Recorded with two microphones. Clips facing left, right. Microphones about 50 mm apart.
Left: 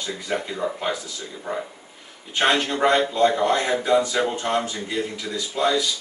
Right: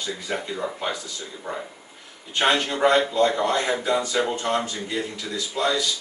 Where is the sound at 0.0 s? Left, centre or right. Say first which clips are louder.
Left 2 dB; centre.